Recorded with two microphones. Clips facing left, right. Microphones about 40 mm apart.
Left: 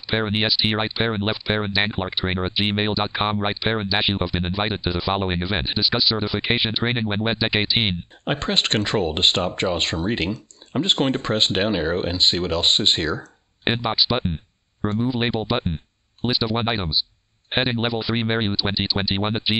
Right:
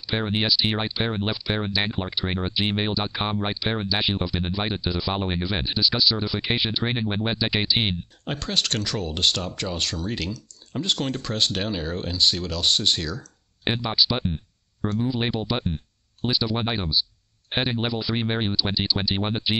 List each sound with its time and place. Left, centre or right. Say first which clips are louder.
0.0 s speech: left 3 dB; left
8.3 s speech: left 5 dB; left
13.7 s speech: left 2 dB; left